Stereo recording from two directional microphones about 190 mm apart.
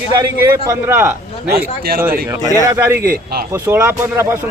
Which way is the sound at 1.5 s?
50° right (ahead or behind).